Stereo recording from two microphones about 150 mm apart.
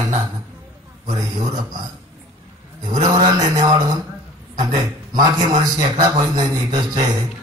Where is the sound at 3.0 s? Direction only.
25° right (ahead or behind).